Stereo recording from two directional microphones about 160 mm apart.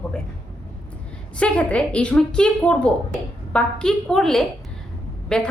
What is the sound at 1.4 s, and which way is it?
A woman's voice, 5° left (ahead or behind).